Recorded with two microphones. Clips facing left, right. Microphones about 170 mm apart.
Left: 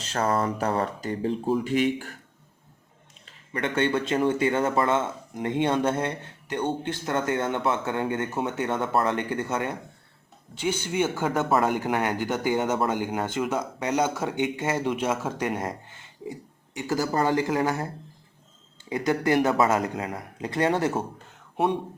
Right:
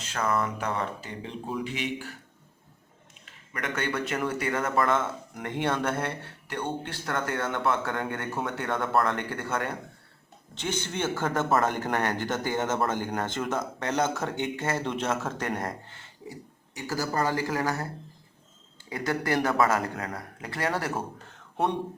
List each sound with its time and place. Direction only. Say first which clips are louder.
0.0 s speech: left 3 dB; 35° left (ahead or behind)
3.5 s speech: left 6 dB; 30° left (ahead or behind)
18.9 s speech: left 5 dB; 20° left (ahead or behind)